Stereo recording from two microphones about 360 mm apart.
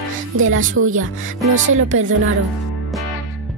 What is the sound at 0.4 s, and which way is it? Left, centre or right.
Speech, right.